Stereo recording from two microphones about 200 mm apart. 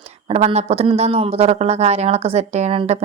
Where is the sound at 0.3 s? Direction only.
30° right (ahead or behind).